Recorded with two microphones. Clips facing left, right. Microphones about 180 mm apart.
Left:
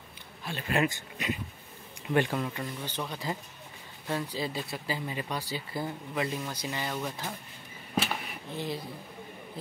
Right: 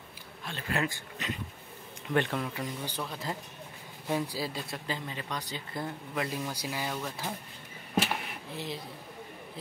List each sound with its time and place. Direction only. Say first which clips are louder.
0.5 s speech: left 4 dB; 15° left (ahead or behind)
2.5 s speech: right 1 dB; 10° right (ahead or behind)
3.0 s speech: left 5 dB; centre (ahead or behind)
4.5 s speech: left 2 dB; centre (ahead or behind)
7.9 s a sound: right 1 dB; 5° right (ahead or behind)